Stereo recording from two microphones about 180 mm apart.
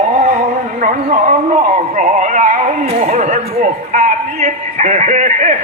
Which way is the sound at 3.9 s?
40° right (ahead or behind).